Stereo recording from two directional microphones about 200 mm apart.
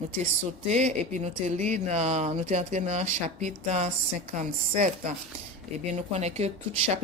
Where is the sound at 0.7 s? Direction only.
35° right (ahead or behind).